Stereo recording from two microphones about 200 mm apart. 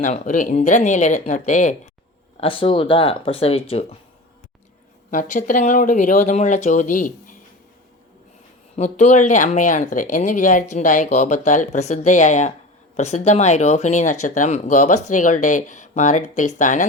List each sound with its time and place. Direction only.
0.0 s speech: 40° left (ahead or behind)
2.4 s speech: 25° left (ahead or behind)
5.1 s speech: 40° left (ahead or behind)
8.7 s speech: 35° left (ahead or behind)